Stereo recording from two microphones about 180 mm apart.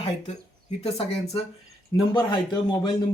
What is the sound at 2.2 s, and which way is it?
Speech, 25° left (ahead or behind).